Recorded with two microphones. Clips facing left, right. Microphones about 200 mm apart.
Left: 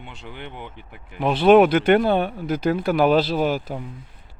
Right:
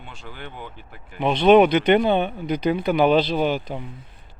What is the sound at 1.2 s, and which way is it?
Speech, 5° left (ahead or behind).